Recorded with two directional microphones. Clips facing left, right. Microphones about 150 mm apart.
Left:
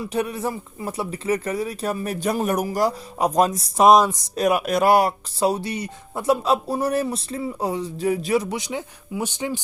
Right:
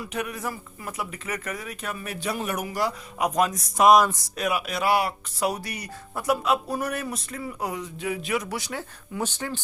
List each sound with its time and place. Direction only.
0.0 s speech: 30° left (ahead or behind)
4.4 s speech: 45° left (ahead or behind)
5.4 s speech: 25° left (ahead or behind)
8.5 s speech: 20° left (ahead or behind)